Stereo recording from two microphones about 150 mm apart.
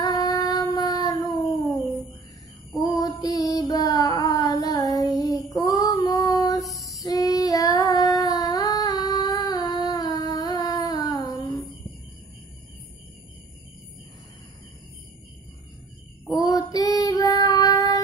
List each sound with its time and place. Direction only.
0.0 s child singing: 25° left (ahead or behind)
2.8 s child singing: 25° left (ahead or behind)
16.3 s child singing: 25° left (ahead or behind)